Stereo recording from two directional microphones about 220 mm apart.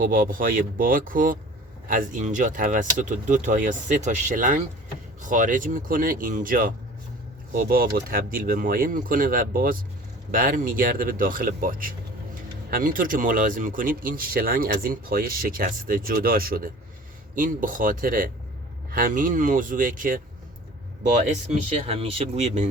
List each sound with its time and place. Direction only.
0.0 s speech: 40° right (ahead or behind)
21.8 s speech: 25° right (ahead or behind)